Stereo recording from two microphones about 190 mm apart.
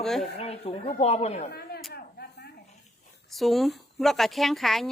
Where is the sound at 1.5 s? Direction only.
55° left (ahead or behind).